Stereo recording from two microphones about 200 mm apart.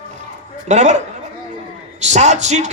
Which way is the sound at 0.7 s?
35° right (ahead or behind).